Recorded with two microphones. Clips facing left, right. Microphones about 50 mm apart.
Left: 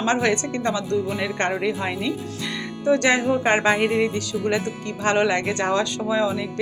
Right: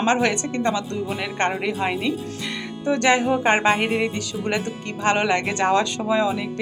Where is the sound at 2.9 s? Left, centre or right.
Right.